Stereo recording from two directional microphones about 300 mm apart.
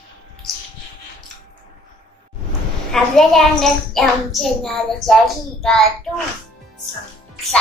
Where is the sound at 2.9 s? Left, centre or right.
Centre.